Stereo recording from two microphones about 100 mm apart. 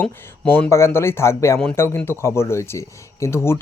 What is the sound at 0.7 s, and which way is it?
Speech, 25° left (ahead or behind).